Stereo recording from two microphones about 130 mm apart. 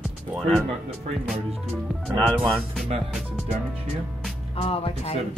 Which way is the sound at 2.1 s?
10° left (ahead or behind).